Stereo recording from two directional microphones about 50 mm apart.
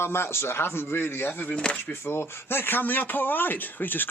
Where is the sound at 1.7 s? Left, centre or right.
Left.